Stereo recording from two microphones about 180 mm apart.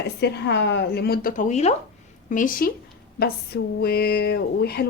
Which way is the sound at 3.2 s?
60° left (ahead or behind).